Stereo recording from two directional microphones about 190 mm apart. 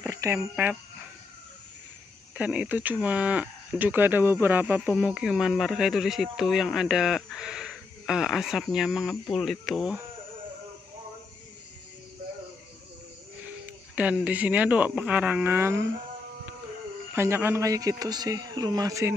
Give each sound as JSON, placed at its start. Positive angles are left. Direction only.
{"t": 0.0, "sound": "speech", "side_deg": -15}
{"t": 2.3, "sound": "speech", "side_deg": -5}
{"t": 13.9, "sound": "speech", "side_deg": -5}
{"t": 17.1, "sound": "speech", "side_deg": -10}